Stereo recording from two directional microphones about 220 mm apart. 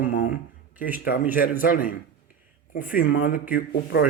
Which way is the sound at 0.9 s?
40° left (ahead or behind).